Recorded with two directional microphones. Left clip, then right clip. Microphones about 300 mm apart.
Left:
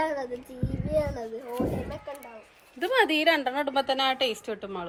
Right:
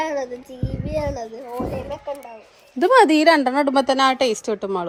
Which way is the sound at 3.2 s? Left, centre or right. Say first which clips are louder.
Right 9 dB; right.